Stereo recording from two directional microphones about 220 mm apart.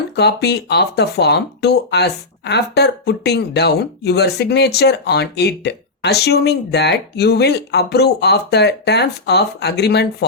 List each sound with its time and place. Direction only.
0.2 s speech: 50° left (ahead or behind)